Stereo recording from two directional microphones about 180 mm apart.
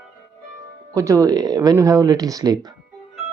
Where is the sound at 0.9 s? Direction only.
15° right (ahead or behind).